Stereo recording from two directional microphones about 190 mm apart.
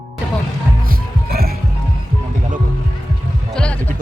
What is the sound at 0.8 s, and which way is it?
Music, 50° right (ahead or behind).